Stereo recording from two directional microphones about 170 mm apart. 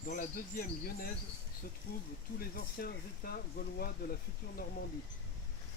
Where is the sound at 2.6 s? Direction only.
60° left (ahead or behind).